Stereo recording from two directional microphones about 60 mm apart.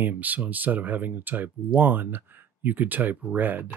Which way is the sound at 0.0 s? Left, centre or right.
Right.